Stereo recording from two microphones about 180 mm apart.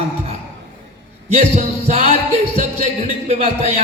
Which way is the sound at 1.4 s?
35° right (ahead or behind).